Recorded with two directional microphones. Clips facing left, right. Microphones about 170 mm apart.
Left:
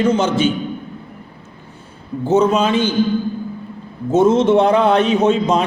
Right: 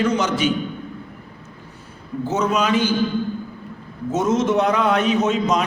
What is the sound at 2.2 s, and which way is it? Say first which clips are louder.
Speech: left 6 dB; 30° left (ahead or behind).